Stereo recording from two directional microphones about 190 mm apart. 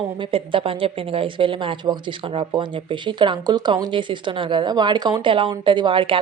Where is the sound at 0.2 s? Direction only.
30° right (ahead or behind).